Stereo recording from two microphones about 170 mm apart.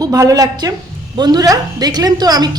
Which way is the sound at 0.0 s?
20° right (ahead or behind).